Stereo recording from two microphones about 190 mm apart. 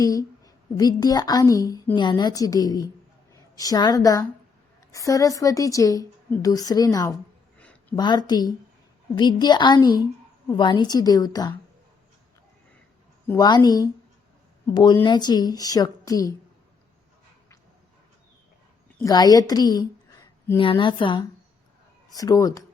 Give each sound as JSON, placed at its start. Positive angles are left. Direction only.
{"t": 0.0, "sound": "a woman's voice", "side_deg": 20}
{"t": 7.6, "sound": "a sound", "side_deg": 5}
{"t": 7.9, "sound": "a woman's voice", "side_deg": 20}
{"t": 13.2, "sound": "a woman's voice", "side_deg": 20}
{"t": 19.0, "sound": "a woman's voice", "side_deg": 20}